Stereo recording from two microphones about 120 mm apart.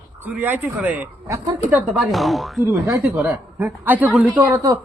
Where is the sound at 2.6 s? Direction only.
25° right (ahead or behind).